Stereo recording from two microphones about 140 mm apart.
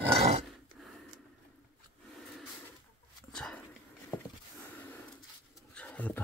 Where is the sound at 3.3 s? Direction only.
5° left (ahead or behind).